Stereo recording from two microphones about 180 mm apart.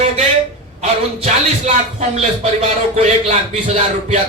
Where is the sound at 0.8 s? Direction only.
35° right (ahead or behind).